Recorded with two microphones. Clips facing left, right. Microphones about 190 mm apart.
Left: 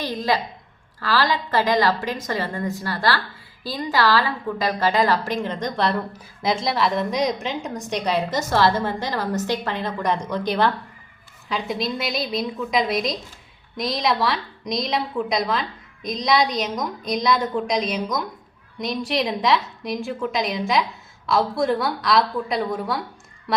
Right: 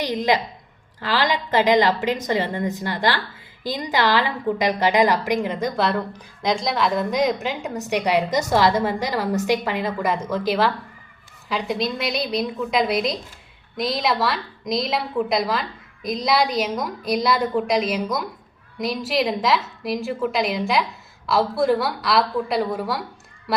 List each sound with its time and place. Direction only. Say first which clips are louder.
0.0 s a woman's voice: right 2 dB; 20° right (ahead or behind); by 23.0 s 5° right (ahead or behind)